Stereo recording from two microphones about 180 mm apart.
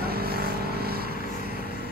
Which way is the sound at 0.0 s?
60° right (ahead or behind).